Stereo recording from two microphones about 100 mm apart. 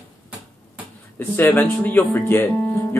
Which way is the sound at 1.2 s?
20° left (ahead or behind).